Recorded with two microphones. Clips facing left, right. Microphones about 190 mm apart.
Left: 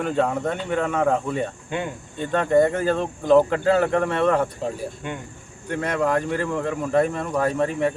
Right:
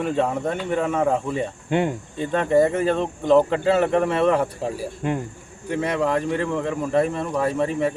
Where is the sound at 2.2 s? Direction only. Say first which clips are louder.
Even; centre (ahead or behind).